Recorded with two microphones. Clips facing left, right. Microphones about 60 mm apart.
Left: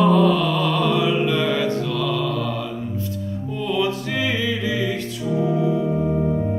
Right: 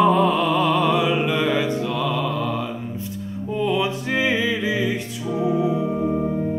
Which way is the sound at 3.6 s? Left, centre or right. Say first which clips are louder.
Right 1 dB; right.